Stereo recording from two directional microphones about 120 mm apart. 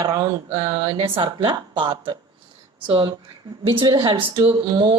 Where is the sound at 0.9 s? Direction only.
45° right (ahead or behind).